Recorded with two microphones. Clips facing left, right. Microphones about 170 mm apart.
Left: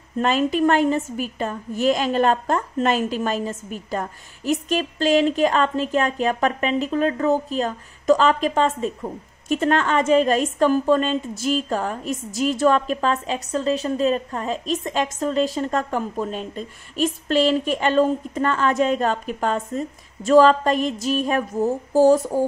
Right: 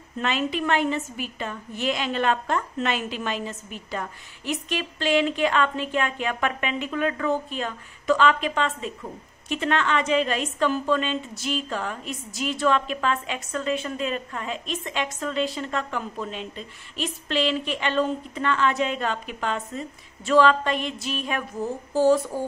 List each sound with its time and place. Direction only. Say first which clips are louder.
0.2 s a woman's voice: left 7 dB; 45° left (ahead or behind)